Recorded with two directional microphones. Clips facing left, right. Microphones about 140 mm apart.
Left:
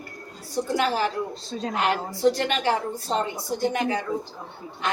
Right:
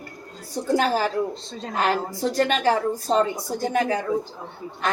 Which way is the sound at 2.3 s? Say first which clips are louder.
Right 4 dB; 45° right (ahead or behind).